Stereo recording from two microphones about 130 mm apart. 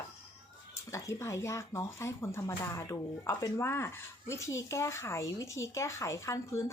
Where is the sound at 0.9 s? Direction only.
25° left (ahead or behind).